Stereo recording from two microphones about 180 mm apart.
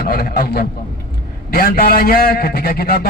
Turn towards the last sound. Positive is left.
turn(degrees=60)  # may be behind; listen again after turning